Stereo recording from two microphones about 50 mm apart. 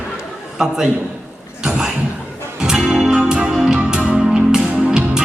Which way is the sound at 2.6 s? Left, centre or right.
Centre.